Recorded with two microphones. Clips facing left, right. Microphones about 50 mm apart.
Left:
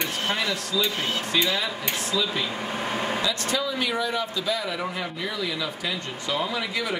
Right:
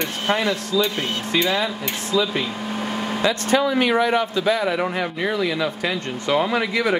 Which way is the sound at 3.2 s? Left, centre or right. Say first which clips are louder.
Right 7 dB; right.